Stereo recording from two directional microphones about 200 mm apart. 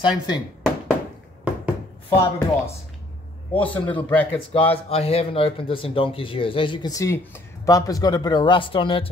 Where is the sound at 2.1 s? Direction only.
15° left (ahead or behind).